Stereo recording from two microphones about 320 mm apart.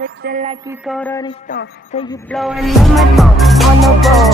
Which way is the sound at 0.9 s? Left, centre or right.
Centre.